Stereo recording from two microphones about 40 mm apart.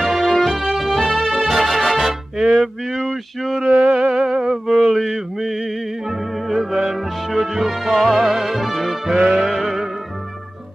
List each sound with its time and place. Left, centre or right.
0.0 s music: centre
2.3 s music: centre
2.6 s a sound: centre
3.9 s music: centre
4.8 s music: centre
8.2 s music: centre